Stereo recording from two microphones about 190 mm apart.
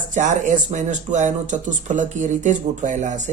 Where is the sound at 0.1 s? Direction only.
40° right (ahead or behind).